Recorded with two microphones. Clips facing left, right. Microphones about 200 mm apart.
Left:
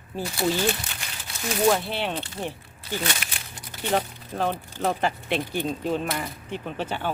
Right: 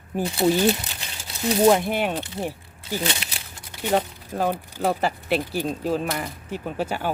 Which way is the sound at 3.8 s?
10° right (ahead or behind).